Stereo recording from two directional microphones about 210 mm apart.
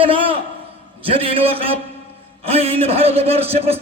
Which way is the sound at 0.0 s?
25° right (ahead or behind).